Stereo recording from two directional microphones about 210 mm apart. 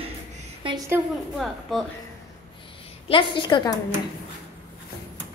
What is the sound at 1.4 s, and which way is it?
Speech, centre (ahead or behind).